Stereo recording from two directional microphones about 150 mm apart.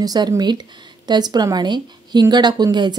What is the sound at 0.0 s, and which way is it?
A woman's voice, 25° right (ahead or behind).